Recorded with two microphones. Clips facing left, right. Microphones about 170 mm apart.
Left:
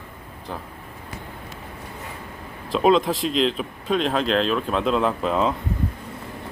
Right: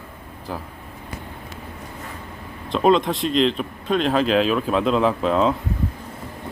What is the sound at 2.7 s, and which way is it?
Speech, centre (ahead or behind).